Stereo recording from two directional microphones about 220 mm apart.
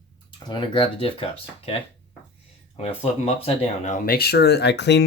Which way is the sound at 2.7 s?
25° left (ahead or behind).